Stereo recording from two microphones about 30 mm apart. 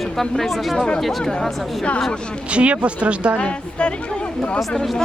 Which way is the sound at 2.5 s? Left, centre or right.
Right.